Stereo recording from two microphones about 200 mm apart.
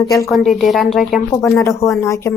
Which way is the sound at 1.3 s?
15° left (ahead or behind).